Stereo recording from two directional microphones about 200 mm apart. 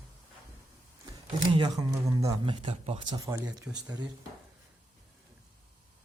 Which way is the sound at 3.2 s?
15° right (ahead or behind).